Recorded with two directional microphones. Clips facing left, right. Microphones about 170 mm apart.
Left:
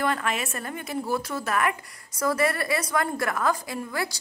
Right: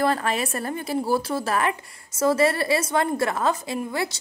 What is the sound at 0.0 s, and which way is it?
Speech, 35° right (ahead or behind).